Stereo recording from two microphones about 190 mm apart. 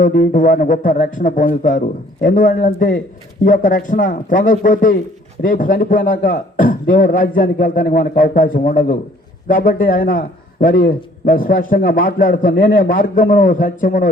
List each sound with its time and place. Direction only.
0.0 s a man's voice: 45° left (ahead or behind)